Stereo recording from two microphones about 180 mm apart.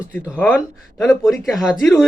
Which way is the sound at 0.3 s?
10° left (ahead or behind).